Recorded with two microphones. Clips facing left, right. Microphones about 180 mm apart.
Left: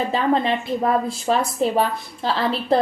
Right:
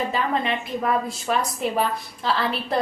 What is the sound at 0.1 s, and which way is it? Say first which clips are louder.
A woman's voice: left 5 dB; 30° left (ahead or behind).